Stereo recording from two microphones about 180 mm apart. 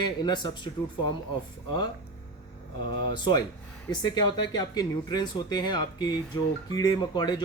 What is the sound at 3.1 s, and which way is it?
Speech, 25° left (ahead or behind).